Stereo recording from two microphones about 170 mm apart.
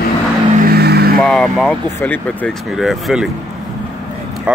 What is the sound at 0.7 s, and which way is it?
Vehicle, 70° right (ahead or behind).